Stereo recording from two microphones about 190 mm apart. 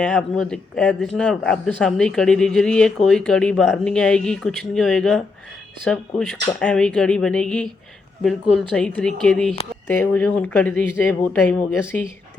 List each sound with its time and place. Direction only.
0.0 s speech: 5° left (ahead or behind)